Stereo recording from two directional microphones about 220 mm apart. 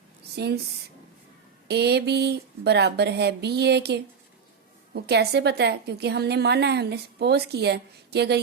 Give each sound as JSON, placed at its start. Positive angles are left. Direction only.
{"t": 0.3, "sound": "a woman's voice", "side_deg": -45}
{"t": 1.6, "sound": "a woman's voice", "side_deg": -50}